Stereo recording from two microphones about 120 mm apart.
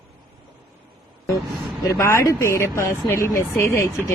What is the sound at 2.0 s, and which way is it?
Speech, 25° left (ahead or behind).